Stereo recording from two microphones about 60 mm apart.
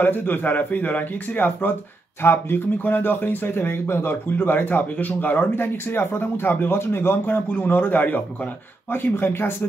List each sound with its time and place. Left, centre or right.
0.0 s speech: left